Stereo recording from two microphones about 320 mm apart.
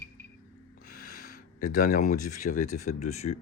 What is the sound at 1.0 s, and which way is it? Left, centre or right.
Speech, left.